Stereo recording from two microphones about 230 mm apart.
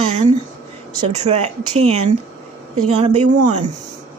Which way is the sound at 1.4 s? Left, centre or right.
Right.